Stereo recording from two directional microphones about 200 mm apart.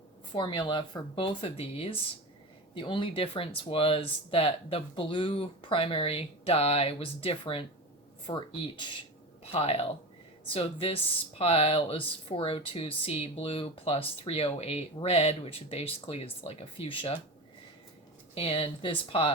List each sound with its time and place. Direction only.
0.3 s speech: 25° left (ahead or behind)
18.3 s speech: 30° left (ahead or behind)